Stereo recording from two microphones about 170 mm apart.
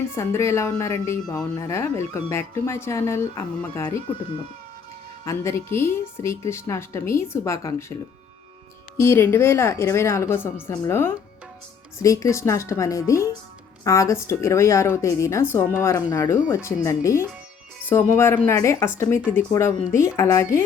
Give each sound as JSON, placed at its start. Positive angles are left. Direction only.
{"t": 0.2, "sound": "a woman's voice", "side_deg": 15}
{"t": 5.2, "sound": "a woman's voice", "side_deg": 15}
{"t": 9.0, "sound": "a woman's voice", "side_deg": 15}